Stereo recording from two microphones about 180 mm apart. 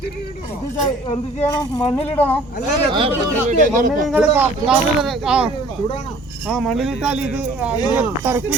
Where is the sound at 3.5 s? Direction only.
50° right (ahead or behind).